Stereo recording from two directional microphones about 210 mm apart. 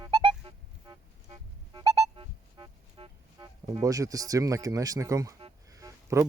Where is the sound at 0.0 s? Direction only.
25° right (ahead or behind).